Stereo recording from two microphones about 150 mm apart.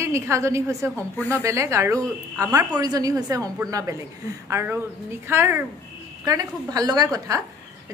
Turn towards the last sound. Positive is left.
turn(degrees=-25)  # may be behind; listen again after turning